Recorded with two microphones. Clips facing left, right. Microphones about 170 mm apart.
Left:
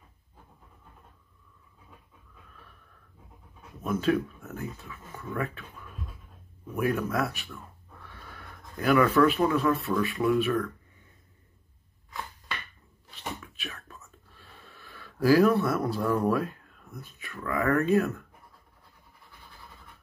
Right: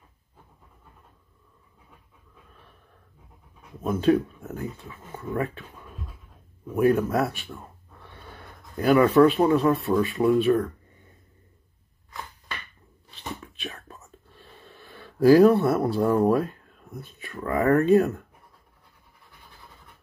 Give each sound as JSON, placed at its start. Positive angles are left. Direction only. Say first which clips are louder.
{"t": 3.8, "sound": "speech", "louder": "right 5 dB", "side_deg": -30}
{"t": 13.4, "sound": "whispering", "louder": "right 4 dB", "side_deg": -30}
{"t": 13.9, "sound": "a sound", "louder": "right 3 dB", "side_deg": -35}
{"t": 16.9, "sound": "speech", "louder": "right 5 dB", "side_deg": -30}